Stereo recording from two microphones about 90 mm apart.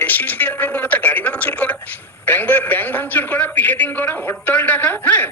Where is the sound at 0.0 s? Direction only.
20° left (ahead or behind).